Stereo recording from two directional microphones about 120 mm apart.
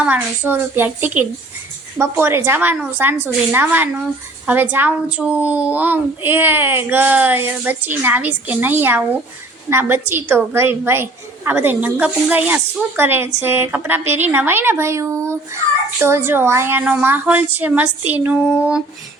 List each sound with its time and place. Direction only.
0.0 s a child's voice: 15° right (ahead or behind)